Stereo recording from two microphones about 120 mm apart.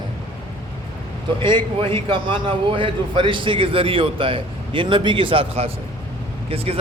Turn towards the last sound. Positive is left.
turn(degrees=-55)  # may be behind; listen again after turning